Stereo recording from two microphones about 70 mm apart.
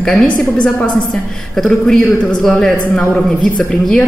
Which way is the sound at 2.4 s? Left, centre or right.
Centre.